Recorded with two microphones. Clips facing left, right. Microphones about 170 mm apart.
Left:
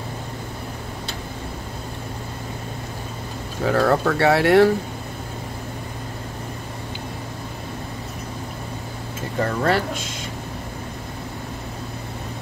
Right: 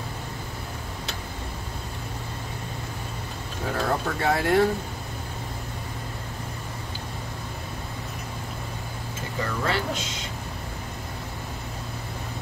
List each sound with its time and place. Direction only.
3.6 s speech: 80° left
9.4 s speech: 50° left (ahead or behind)